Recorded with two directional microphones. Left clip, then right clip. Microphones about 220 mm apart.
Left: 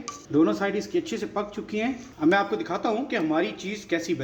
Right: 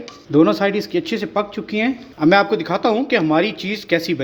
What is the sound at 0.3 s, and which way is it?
Speech, 45° right (ahead or behind).